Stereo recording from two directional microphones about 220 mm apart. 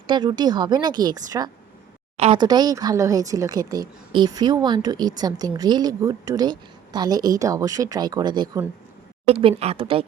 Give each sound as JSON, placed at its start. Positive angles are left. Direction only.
{"t": 0.1, "sound": "a woman's voice", "side_deg": -20}